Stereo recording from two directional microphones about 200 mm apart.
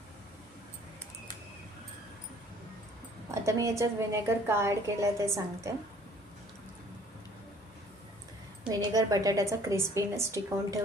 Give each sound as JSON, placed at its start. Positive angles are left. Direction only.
{"t": 3.4, "sound": "a woman's voice", "side_deg": -15}
{"t": 8.7, "sound": "a woman's voice", "side_deg": -20}